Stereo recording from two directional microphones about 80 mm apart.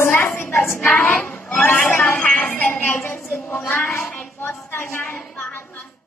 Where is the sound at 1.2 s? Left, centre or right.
Left.